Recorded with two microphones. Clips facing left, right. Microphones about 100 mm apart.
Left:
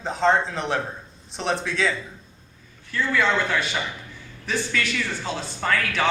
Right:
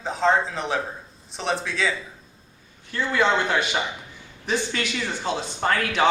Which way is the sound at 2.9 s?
20° right (ahead or behind).